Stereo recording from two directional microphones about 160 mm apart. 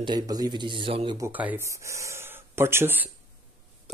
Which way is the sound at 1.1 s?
15° right (ahead or behind).